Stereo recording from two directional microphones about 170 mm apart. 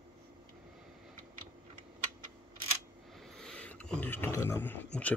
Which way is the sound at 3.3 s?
5° left (ahead or behind).